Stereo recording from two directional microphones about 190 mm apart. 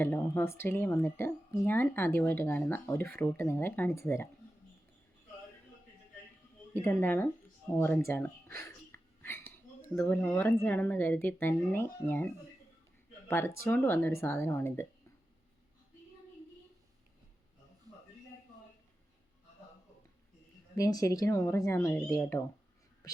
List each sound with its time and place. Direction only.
0.0 s speech: 10° left (ahead or behind)
6.7 s speech: 10° left (ahead or behind)
20.7 s speech: 15° left (ahead or behind)